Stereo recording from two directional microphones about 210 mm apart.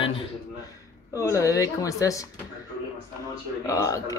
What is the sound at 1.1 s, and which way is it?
Speech, 15° left (ahead or behind).